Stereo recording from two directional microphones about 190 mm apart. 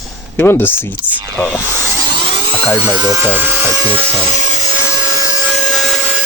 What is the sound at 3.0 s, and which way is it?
Speech, 15° right (ahead or behind).